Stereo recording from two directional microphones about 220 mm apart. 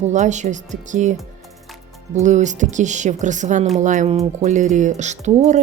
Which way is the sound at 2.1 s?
35° right (ahead or behind).